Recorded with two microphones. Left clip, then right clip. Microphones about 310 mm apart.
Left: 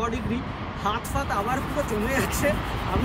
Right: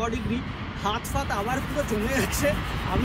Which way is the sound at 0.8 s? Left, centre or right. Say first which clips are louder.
Left 1 dB; centre.